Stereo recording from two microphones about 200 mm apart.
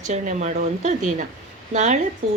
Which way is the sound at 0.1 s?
35° right (ahead or behind).